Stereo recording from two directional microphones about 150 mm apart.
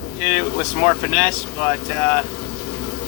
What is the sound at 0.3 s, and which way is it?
Speech, 10° left (ahead or behind).